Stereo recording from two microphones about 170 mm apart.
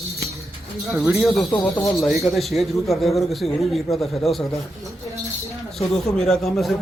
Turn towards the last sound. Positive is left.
turn(degrees=0)  # may be behind; listen again after turning